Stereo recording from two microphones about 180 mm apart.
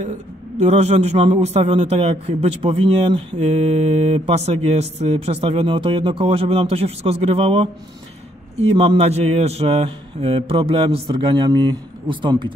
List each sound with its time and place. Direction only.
0.6 s a man's voice: 35° right (ahead or behind)